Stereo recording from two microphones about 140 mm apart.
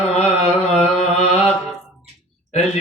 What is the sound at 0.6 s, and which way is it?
Carnatic music, 50° left (ahead or behind).